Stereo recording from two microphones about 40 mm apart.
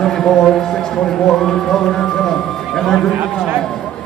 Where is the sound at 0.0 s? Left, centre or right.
Centre.